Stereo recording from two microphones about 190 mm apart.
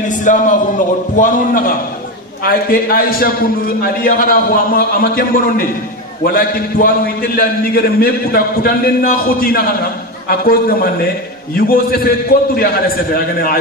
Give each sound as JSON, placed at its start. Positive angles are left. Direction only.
{"t": 0.2, "sound": "a man's voice", "side_deg": 45}